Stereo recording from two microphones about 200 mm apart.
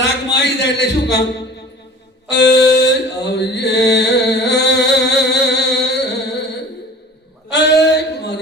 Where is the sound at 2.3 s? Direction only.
55° left (ahead or behind).